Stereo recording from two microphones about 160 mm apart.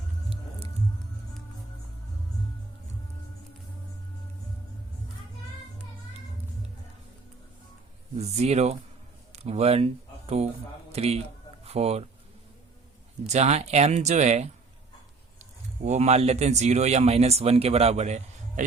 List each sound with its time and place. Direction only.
8.2 s speech: 45° right (ahead or behind)
13.2 s speech: 45° right (ahead or behind)